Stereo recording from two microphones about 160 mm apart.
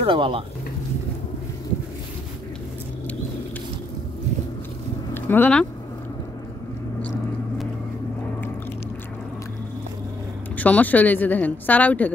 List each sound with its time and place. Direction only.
0.0 s speech: 35° right (ahead or behind)
5.1 s speech: 10° left (ahead or behind)
7.0 s a sound: 10° left (ahead or behind)
10.6 s a woman's voice: 10° left (ahead or behind)